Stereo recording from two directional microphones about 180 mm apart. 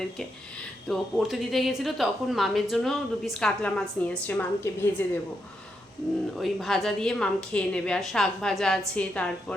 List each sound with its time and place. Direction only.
0.9 s a woman's voice: centre (ahead or behind)
6.3 s a woman's voice: centre (ahead or behind)